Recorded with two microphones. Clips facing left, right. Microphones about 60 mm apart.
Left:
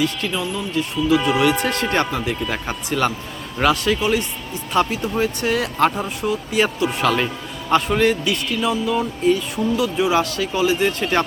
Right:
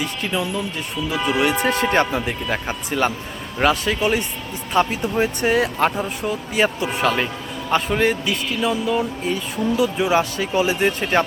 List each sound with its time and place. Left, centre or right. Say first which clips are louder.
0.3 s speech: right 1 dB; centre
0.8 s a man's voice: left 6 dB; centre
10.2 s speech: even; centre
10.7 s speech: even; centre